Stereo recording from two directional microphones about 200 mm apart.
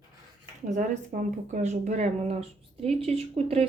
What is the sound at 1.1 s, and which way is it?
Speech, 40° right (ahead or behind).